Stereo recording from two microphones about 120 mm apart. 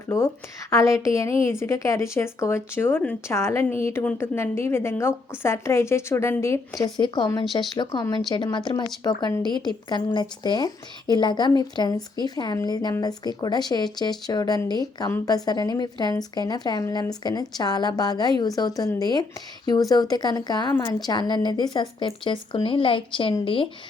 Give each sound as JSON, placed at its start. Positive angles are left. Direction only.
{"t": 0.7, "sound": "a woman's voice", "side_deg": 25}
{"t": 7.0, "sound": "a woman's voice", "side_deg": 40}